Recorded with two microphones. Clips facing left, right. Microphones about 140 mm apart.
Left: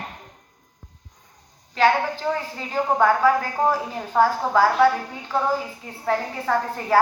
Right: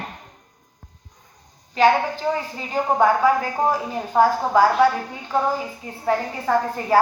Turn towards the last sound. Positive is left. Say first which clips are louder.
# right 2 dB
turn(degrees=-10)  # may be behind; listen again after turning